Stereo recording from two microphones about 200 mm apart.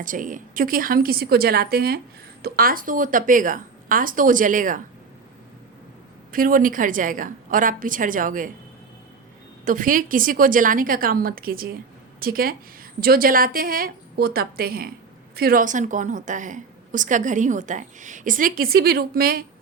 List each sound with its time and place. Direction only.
0.0 s a woman's voice: 40° right (ahead or behind)
6.3 s a woman's voice: 45° right (ahead or behind)
9.6 s a woman's voice: 45° right (ahead or behind)